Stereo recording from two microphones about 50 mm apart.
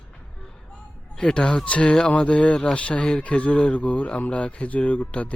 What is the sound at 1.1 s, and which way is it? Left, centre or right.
Speech, centre.